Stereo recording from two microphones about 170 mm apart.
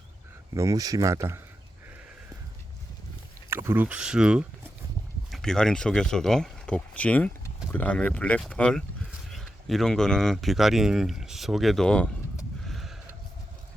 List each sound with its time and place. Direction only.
0.5 s speech: 20° right (ahead or behind)
3.5 s speech: 15° right (ahead or behind); by 12.0 s 5° left (ahead or behind)
12.6 s a sound: centre (ahead or behind)